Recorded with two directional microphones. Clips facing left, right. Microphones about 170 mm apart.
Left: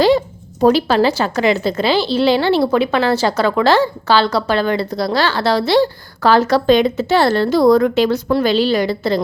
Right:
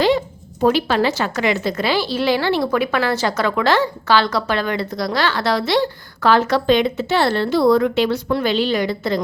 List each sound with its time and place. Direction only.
0.6 s a woman's voice: 35° left (ahead or behind)